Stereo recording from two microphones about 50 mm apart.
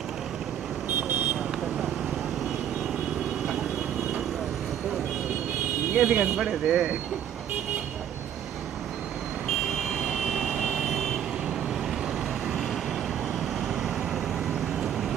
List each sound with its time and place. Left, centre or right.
5.9 s speech: right
10.2 s vehicle: centre